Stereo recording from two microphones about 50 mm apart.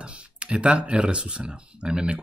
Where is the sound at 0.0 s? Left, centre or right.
Right.